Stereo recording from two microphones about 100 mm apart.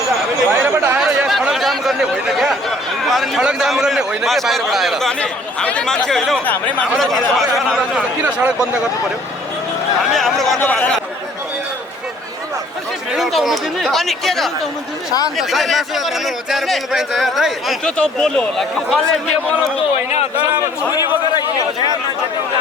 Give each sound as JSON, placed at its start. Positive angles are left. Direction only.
{"t": 0.5, "sound": "chatter", "side_deg": -20}
{"t": 0.9, "sound": "speech", "side_deg": -5}
{"t": 6.4, "sound": "speech", "side_deg": 15}
{"t": 6.9, "sound": "a man's voice", "side_deg": 0}
{"t": 8.2, "sound": "speech", "side_deg": -20}
{"t": 10.1, "sound": "a man's voice", "side_deg": 0}
{"t": 10.6, "sound": "speech", "side_deg": 15}
{"t": 13.1, "sound": "a man's voice", "side_deg": 0}